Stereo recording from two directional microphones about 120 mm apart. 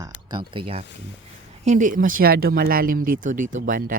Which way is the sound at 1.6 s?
85° right.